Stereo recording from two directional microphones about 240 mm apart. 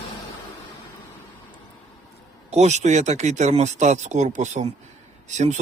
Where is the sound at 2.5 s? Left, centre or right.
Right.